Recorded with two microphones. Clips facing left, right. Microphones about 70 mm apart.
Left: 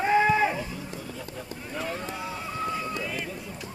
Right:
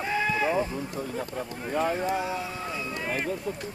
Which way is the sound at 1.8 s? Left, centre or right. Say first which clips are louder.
Right 7 dB; right.